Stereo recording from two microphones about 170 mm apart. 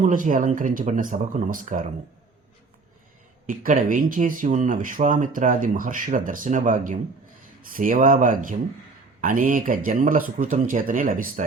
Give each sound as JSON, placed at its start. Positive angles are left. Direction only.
{"t": 0.0, "sound": "speech", "side_deg": -50}
{"t": 3.4, "sound": "speech", "side_deg": -55}